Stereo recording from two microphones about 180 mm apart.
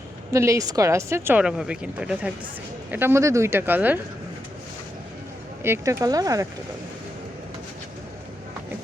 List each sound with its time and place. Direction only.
0.3 s speech: 15° right (ahead or behind)
5.6 s speech: 15° right (ahead or behind)